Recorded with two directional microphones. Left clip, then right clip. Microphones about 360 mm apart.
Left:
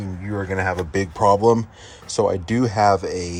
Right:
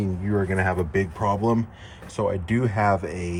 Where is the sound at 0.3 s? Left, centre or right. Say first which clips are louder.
Left 1 dB; centre.